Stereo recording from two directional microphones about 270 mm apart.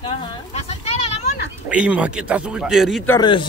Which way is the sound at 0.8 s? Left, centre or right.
Left.